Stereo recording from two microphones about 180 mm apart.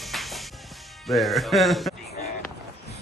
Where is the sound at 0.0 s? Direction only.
Centre (ahead or behind).